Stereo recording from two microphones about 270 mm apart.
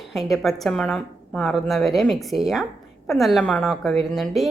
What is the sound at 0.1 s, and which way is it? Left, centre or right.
A woman's voice, centre.